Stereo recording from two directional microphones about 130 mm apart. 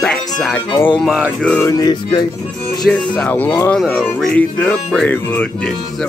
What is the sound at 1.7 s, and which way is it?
Music, 30° left (ahead or behind).